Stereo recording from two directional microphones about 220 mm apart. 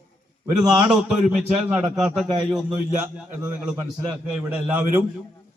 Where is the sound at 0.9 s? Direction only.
5° right (ahead or behind).